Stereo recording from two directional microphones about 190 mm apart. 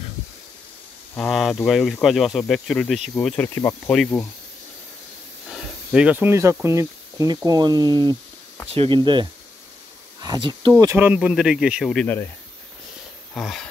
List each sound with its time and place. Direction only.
1.1 s speech: 5° left (ahead or behind)
5.5 s snake: 5° right (ahead or behind)
6.6 s speech: 15° right (ahead or behind); by 12.3 s 5° left (ahead or behind)
13.3 s speech: 5° left (ahead or behind)